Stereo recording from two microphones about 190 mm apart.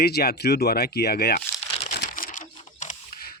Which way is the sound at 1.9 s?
50° left (ahead or behind).